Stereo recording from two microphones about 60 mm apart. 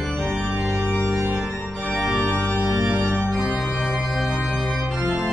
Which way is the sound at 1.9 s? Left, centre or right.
Centre.